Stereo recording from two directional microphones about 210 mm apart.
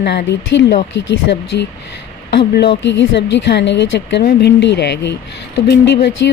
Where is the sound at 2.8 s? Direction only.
55° left (ahead or behind).